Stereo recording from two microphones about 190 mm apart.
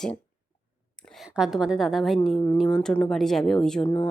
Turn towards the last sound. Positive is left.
turn(degrees=5)  # may be behind; listen again after turning